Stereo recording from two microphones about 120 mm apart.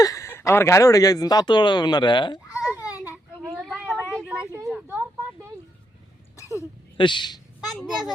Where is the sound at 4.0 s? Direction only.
5° right (ahead or behind).